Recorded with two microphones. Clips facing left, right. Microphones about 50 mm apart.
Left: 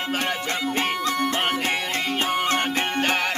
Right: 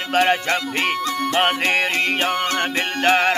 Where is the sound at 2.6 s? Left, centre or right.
Right.